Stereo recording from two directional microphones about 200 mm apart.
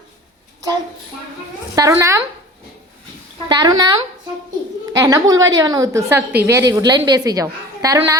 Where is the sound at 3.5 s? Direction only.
20° right (ahead or behind).